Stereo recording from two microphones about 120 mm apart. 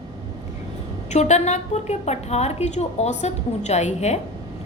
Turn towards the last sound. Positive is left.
turn(degrees=65)  # may be behind; listen again after turning